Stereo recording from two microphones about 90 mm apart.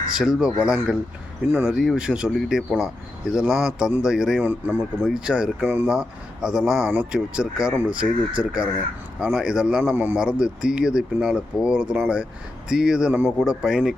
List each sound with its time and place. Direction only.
0.1 s speech: 10° right (ahead or behind)
4.4 s speech: 20° right (ahead or behind)
4.8 s speech: 10° left (ahead or behind)
5.1 s speech: 10° right (ahead or behind)
5.9 s speech: 10° right (ahead or behind)
9.9 s speech: 20° right (ahead or behind)
10.2 s speech: 10° right (ahead or behind)